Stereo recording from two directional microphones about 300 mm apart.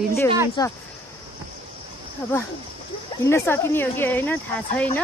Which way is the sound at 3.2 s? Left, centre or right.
Centre.